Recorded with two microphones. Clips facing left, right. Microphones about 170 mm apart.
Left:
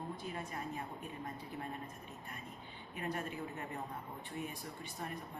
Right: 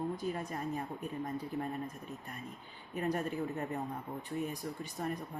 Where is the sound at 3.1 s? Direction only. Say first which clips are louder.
Right 6 dB; 40° right (ahead or behind).